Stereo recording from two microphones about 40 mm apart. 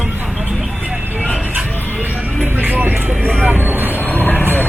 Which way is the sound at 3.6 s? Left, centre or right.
Right.